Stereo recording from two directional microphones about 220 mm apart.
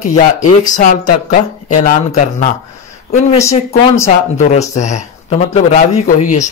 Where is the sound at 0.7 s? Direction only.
35° left (ahead or behind).